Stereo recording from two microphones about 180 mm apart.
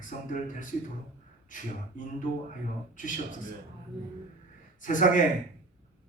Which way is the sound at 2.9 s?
45° left (ahead or behind).